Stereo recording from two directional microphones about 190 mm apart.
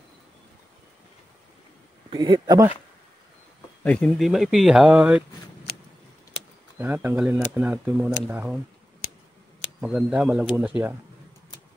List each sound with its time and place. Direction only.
2.0 s speech: 25° right (ahead or behind)
3.8 s speech: 5° left (ahead or behind)
6.8 s speech: 10° right (ahead or behind)
9.8 s speech: 5° right (ahead or behind)